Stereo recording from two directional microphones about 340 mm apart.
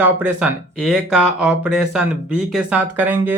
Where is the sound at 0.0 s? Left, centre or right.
Centre.